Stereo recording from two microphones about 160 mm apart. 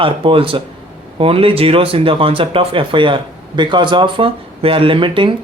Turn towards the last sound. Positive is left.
turn(degrees=-30)  # may be behind; listen again after turning